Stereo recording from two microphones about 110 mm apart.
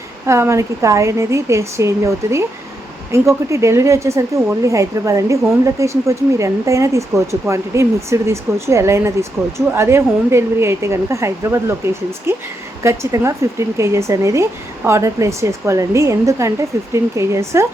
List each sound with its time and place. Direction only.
0.3 s speech: 25° right (ahead or behind)